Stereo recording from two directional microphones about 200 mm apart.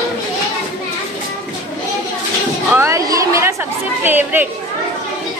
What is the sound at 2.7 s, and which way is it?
Speech, 15° right (ahead or behind).